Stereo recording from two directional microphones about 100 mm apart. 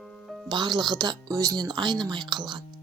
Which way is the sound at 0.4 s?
45° right (ahead or behind).